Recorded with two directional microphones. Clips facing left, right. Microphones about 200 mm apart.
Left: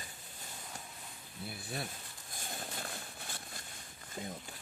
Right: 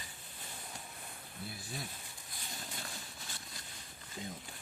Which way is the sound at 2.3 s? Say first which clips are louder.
Left 4 dB; 50° left (ahead or behind).